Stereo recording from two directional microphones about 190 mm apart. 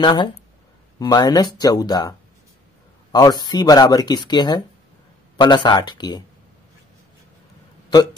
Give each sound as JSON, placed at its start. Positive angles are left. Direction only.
{"t": 0.0, "sound": "speech", "side_deg": 25}
{"t": 7.9, "sound": "a man's voice", "side_deg": 20}